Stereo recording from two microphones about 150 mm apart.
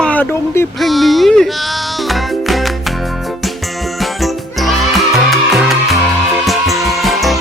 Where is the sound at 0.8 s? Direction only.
Centre (ahead or behind).